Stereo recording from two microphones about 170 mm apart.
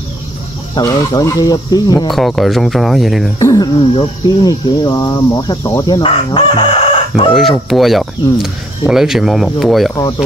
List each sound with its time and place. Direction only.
0.7 s speech: 20° left (ahead or behind)
2.0 s speech: centre (ahead or behind)
3.3 s speech: 20° left (ahead or behind)
6.0 s chicken: 30° left (ahead or behind)
7.3 s speech: centre (ahead or behind)